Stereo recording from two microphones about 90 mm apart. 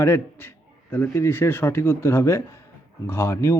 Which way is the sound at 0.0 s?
25° left (ahead or behind).